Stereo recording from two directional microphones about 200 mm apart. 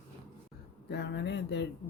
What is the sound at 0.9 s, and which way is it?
Speech, 60° left (ahead or behind).